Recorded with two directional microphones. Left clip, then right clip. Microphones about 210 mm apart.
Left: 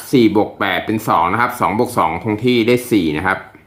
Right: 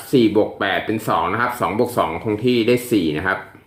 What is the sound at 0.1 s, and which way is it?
Speech, 25° left (ahead or behind).